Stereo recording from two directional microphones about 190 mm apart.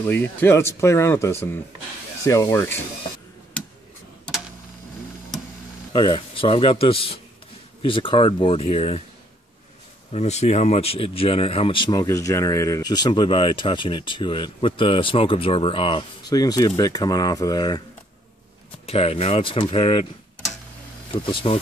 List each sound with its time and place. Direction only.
0.0 s speech: 10° left (ahead or behind)
5.9 s speech: 25° left (ahead or behind)
10.1 s speech: 35° left (ahead or behind)
18.9 s speech: 30° left (ahead or behind)
21.1 s speech: 30° left (ahead or behind)